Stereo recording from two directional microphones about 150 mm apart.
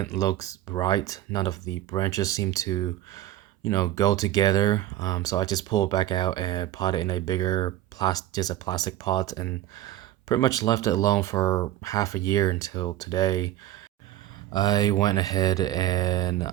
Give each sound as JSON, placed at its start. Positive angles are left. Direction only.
{"t": 0.2, "sound": "speech", "side_deg": 20}
{"t": 14.5, "sound": "speech", "side_deg": 25}